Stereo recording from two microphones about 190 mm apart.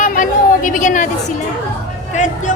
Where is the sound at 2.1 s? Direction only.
40° left (ahead or behind).